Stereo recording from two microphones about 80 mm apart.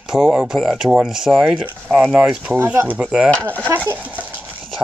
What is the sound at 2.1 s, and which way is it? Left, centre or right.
Speech, centre.